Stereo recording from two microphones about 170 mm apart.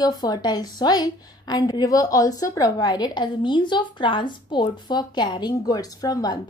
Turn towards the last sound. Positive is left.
turn(degrees=25)  # may be behind; listen again after turning